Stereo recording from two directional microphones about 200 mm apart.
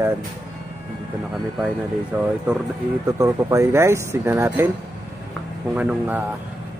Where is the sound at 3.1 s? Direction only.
15° right (ahead or behind).